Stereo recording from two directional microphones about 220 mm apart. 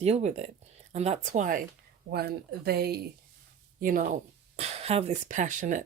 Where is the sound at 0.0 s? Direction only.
30° right (ahead or behind).